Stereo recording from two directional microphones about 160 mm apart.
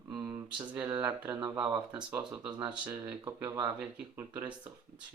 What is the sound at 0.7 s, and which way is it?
Speech, 10° right (ahead or behind).